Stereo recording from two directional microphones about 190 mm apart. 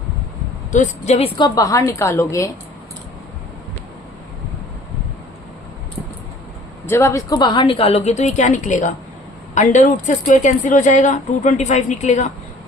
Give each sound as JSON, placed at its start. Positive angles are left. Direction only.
{"t": 0.7, "sound": "speech", "side_deg": 40}
{"t": 1.4, "sound": "a woman's voice", "side_deg": 20}
{"t": 6.8, "sound": "speech", "side_deg": 15}